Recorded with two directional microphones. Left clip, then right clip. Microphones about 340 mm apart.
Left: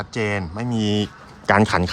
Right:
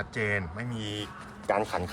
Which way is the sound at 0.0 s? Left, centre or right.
Centre.